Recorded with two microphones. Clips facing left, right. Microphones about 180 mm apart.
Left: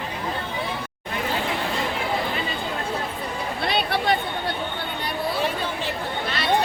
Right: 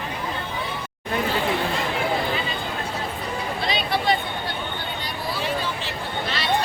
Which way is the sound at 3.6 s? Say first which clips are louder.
Left 1 dB; 60° left (ahead or behind).